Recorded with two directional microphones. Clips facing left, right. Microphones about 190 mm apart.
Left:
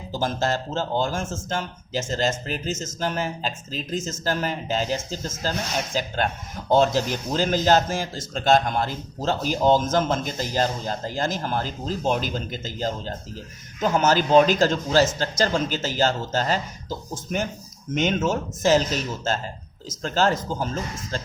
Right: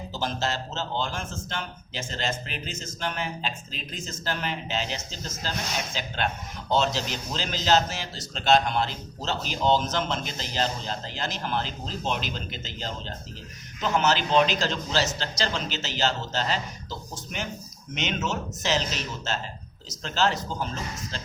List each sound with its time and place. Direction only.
0.1 s a man's voice: 45° left (ahead or behind)
17.9 s a man's voice: 45° left (ahead or behind)